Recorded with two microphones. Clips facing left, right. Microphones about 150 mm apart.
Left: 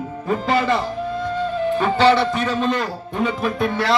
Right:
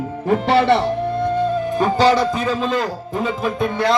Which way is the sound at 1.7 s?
40° right (ahead or behind).